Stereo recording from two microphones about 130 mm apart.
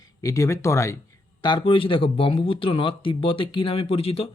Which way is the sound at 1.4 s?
35° left (ahead or behind).